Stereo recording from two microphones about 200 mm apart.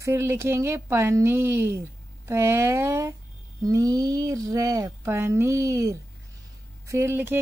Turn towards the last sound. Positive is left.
turn(degrees=-10)  # may be behind; listen again after turning